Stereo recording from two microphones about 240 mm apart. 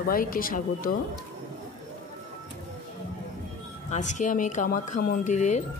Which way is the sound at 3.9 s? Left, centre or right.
Left.